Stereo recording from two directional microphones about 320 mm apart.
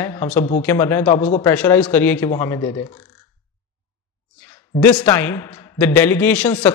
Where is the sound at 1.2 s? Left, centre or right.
Centre.